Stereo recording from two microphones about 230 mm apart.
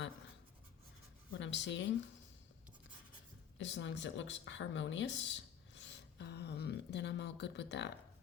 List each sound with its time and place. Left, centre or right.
1.3 s speech: left
3.6 s speech: left